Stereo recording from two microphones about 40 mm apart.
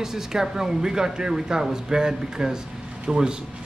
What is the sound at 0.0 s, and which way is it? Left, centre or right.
Speech, centre.